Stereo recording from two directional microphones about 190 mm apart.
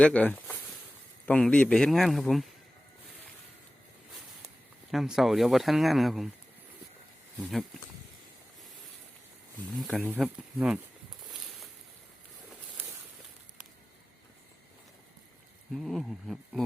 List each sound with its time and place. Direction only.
0.0 s speech: 5° left (ahead or behind)
4.9 s speech: centre (ahead or behind)
9.8 s speech: 5° left (ahead or behind)
10.2 s speech: 5° right (ahead or behind)
15.7 s speech: centre (ahead or behind)